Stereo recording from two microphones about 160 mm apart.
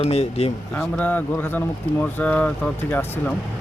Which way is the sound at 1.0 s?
10° left (ahead or behind).